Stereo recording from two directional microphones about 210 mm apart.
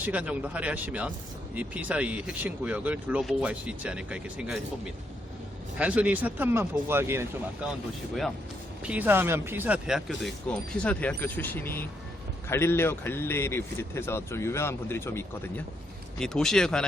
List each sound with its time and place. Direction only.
0.0 s speech: 5° right (ahead or behind)
5.7 s speech: 5° right (ahead or behind)
8.8 s a man's voice: 5° right (ahead or behind)